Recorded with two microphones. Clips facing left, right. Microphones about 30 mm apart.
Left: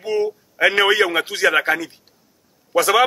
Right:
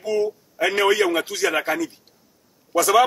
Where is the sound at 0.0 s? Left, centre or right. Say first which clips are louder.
Left 1 dB; left.